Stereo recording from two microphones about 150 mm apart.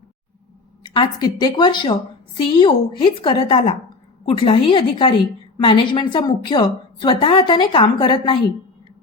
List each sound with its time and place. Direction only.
0.8 s a woman's voice: 30° left (ahead or behind)